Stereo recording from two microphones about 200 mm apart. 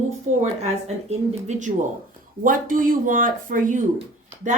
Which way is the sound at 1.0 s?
35° right (ahead or behind).